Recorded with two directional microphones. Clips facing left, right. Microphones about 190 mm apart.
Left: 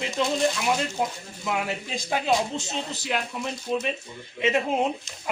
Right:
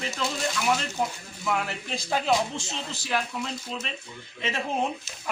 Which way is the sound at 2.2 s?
20° left (ahead or behind).